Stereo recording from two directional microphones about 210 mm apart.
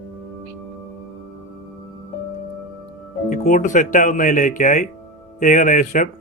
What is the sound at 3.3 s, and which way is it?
A man's voice, 35° left (ahead or behind).